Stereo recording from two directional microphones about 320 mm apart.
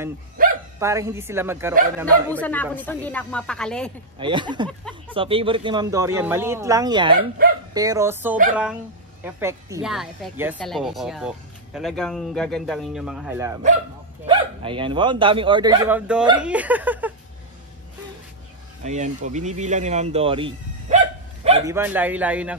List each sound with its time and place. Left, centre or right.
0.7 s speech: centre
2.3 s speech: centre
4.2 s speech: centre
4.6 s a sound: centre
5.1 s speech: centre
7.2 s speech: right
7.7 s speech: centre
18.8 s speech: right
21.7 s speech: centre